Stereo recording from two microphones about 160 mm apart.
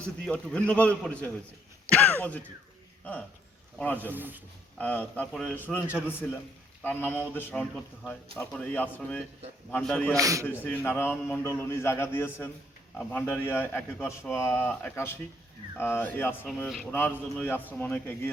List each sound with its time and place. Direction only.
0.0 s a man's voice: 5° left (ahead or behind)
3.0 s speech: 10° left (ahead or behind)
3.9 s a man's voice: 10° right (ahead or behind)
4.8 s a man's voice: 10° left (ahead or behind)
5.6 s a man's voice: 10° left (ahead or behind)
10.2 s speech: 20° right (ahead or behind)
10.4 s a man's voice: 10° left (ahead or behind)
16.5 s a man's voice: centre (ahead or behind)